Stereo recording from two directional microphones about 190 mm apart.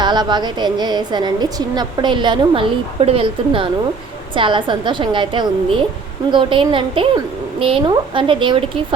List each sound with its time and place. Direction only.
0.0 s a woman's voice: 25° right (ahead or behind)